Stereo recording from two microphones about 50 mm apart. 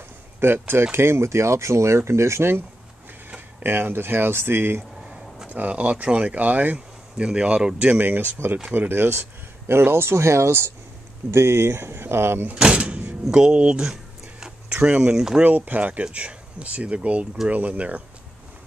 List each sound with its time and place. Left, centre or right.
0.4 s speech: right
3.3 s tick-tock: right
3.6 s speech: right
5.0 s a sound: centre
5.5 s speech: right
7.2 s speech: centre
7.9 s speech: right
8.4 s speech: right
12.5 s door: centre
13.3 s speech: centre
15.4 s speech: right